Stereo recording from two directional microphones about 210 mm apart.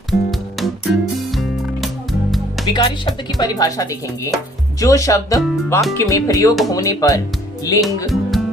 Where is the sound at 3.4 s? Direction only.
15° left (ahead or behind).